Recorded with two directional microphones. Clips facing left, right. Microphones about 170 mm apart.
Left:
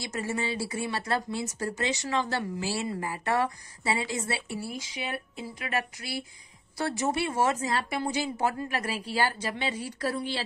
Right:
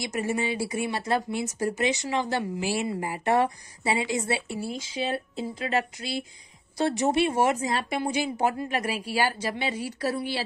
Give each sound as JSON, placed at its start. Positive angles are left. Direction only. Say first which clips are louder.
{"t": 0.0, "sound": "speech", "louder": "right 4 dB", "side_deg": -15}